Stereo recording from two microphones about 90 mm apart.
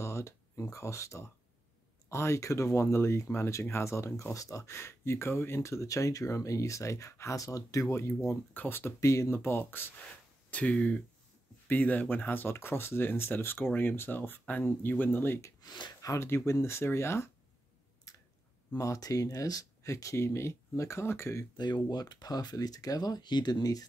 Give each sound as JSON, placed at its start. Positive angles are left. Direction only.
{"t": 0.0, "sound": "speech", "side_deg": 30}
{"t": 15.6, "sound": "speech", "side_deg": 55}
{"t": 16.0, "sound": "speech", "side_deg": 35}
{"t": 18.1, "sound": "a sound", "side_deg": 40}
{"t": 18.8, "sound": "speech", "side_deg": 40}
{"t": 21.5, "sound": "speech", "side_deg": 50}